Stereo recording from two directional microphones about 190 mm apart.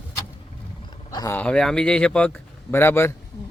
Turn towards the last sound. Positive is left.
turn(degrees=10)  # may be behind; listen again after turning